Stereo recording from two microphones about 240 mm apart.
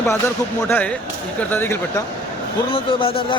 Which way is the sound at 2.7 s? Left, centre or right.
Left.